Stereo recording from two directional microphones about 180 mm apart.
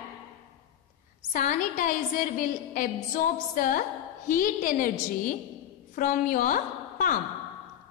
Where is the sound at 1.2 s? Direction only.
45° left (ahead or behind).